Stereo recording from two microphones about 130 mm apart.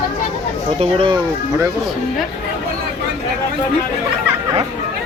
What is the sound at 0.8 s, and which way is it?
Speech, 40° right (ahead or behind).